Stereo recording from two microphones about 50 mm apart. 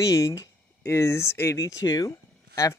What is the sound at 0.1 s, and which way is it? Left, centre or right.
Speech, left.